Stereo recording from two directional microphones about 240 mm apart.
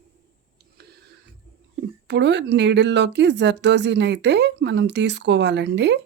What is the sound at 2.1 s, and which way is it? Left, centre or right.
Speech, right.